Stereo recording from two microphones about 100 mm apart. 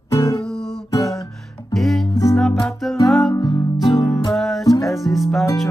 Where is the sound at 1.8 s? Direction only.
Centre (ahead or behind).